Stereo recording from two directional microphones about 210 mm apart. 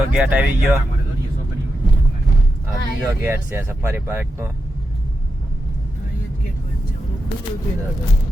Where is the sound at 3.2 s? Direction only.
10° right (ahead or behind).